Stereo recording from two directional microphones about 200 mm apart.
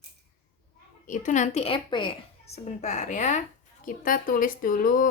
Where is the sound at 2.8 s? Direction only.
35° left (ahead or behind).